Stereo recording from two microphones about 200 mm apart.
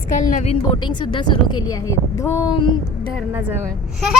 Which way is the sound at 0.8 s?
25° left (ahead or behind).